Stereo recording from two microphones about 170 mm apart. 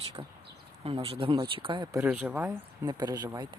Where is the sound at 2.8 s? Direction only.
25° right (ahead or behind).